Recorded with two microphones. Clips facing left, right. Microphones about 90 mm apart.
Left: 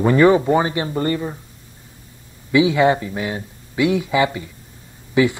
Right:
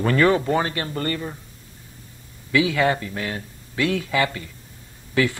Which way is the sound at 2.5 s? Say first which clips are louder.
Left 5 dB; 20° left (ahead or behind).